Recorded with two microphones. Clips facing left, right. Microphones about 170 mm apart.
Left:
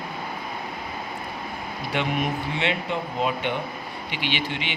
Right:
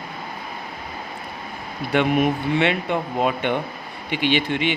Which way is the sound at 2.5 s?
55° right (ahead or behind).